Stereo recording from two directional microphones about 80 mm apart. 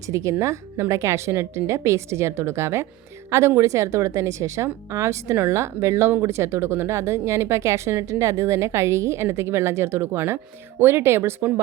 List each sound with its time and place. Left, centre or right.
0.1 s a woman's voice: right